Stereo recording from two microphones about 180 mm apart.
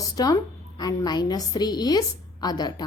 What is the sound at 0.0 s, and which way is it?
A woman's voice, 20° left (ahead or behind).